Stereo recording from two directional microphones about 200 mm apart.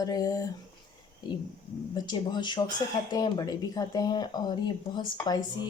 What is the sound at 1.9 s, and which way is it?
Speech, 20° left (ahead or behind).